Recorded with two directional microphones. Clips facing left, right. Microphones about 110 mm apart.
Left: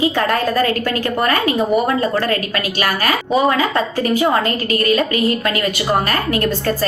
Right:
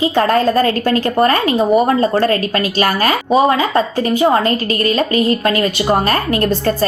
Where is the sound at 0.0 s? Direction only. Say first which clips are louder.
Right 4 dB; 30° right (ahead or behind).